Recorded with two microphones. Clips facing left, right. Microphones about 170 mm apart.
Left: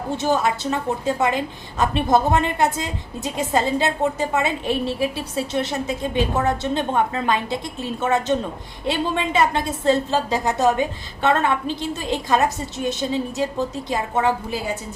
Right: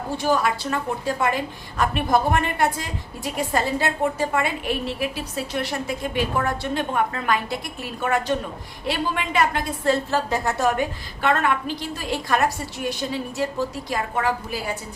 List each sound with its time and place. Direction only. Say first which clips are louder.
0.2 s a woman's voice: left 1 dB; 20° left (ahead or behind)